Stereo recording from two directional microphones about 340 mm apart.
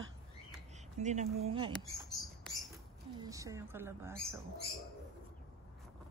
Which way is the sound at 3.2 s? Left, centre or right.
Centre.